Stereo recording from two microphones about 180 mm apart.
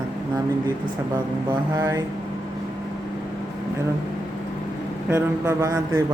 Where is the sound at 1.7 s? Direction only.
20° right (ahead or behind).